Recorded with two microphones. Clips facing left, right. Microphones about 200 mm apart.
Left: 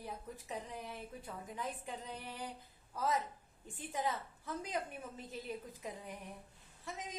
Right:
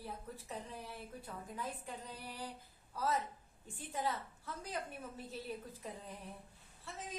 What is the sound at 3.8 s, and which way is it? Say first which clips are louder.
A woman's voice: left 1 dB; 15° left (ahead or behind).